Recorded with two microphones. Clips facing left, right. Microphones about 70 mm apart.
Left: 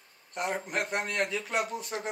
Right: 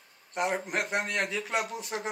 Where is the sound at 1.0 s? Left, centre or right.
Left.